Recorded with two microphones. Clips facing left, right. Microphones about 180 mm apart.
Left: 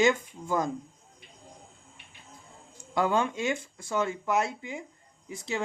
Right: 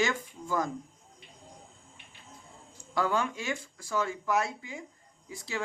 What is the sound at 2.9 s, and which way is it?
Speech, 20° left (ahead or behind).